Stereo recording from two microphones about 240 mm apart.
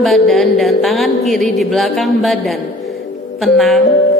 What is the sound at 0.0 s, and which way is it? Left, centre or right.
A woman's voice, centre.